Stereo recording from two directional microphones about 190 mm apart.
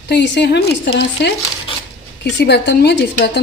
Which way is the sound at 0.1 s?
65° left (ahead or behind).